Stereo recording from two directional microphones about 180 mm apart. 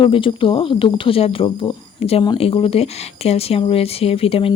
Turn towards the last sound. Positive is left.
turn(degrees=30)  # may be behind; listen again after turning